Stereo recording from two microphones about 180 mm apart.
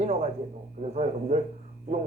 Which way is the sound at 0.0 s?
40° right (ahead or behind).